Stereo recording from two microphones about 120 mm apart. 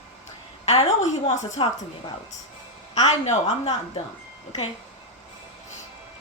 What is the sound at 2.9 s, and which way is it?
Speech, 70° left (ahead or behind).